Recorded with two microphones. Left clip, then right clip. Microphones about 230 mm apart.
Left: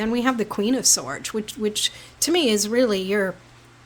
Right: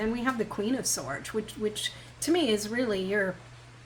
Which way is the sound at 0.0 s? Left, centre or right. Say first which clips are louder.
Left 7 dB; left.